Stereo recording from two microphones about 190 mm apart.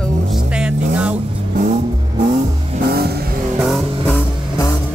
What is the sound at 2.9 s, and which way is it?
Vehicle, 55° right (ahead or behind).